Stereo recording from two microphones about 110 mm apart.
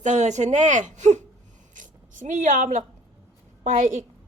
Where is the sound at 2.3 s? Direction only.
90° right.